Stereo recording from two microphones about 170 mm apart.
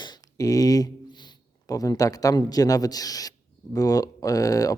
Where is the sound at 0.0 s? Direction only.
25° left (ahead or behind).